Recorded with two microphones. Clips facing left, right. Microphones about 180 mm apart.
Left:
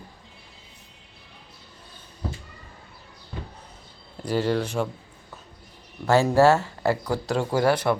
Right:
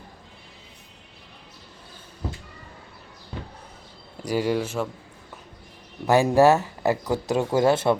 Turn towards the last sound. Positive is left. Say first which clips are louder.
# right 2 dB
turn(degrees=-20)  # may be behind; listen again after turning